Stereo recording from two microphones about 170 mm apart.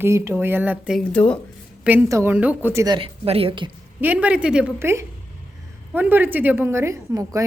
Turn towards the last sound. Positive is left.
turn(degrees=-20)  # may be behind; listen again after turning